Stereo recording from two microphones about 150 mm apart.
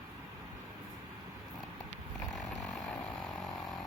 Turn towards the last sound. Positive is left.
turn(degrees=0)  # may be behind; listen again after turning